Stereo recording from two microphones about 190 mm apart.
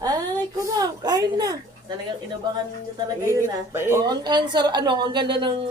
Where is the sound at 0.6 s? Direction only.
20° right (ahead or behind).